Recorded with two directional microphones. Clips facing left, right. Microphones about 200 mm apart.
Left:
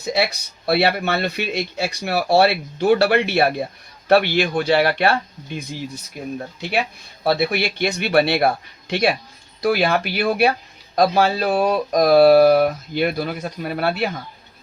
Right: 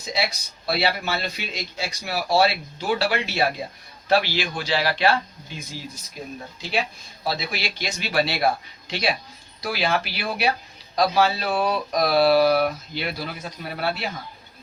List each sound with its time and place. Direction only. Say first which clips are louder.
0.0 s speech: left 6 dB; 60° left (ahead or behind)
7.3 s speech: left 9 dB; 60° left (ahead or behind)